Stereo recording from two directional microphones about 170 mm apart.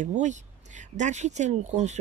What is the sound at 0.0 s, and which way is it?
Speech, 45° right (ahead or behind).